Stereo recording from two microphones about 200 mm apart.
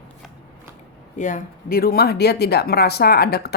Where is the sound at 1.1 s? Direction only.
40° left (ahead or behind).